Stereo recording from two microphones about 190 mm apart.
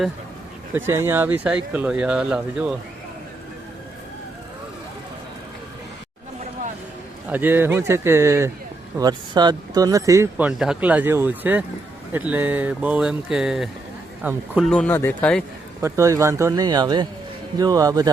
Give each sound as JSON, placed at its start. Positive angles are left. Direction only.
{"t": 0.7, "sound": "speech", "side_deg": -10}
{"t": 7.3, "sound": "speech", "side_deg": -10}
{"t": 14.7, "sound": "speech", "side_deg": 5}
{"t": 15.8, "sound": "speech", "side_deg": -15}